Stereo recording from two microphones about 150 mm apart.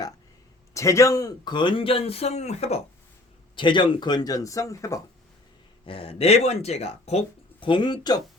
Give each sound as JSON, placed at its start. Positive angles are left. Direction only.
{"t": 0.7, "sound": "speech", "side_deg": 20}
{"t": 3.5, "sound": "speech", "side_deg": 35}
{"t": 5.8, "sound": "speech", "side_deg": 35}